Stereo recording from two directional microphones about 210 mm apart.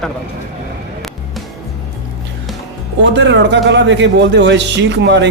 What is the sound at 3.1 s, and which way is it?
Speech, 60° right (ahead or behind).